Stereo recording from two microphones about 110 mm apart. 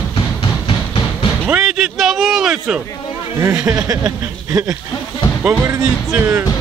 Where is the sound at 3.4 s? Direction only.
25° right (ahead or behind).